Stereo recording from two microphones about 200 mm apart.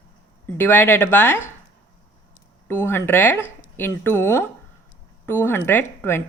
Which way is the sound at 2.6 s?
10° left (ahead or behind).